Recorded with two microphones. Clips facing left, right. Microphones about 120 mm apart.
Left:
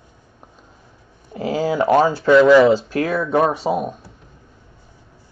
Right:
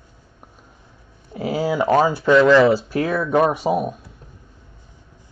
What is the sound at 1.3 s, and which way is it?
Speech, 10° right (ahead or behind).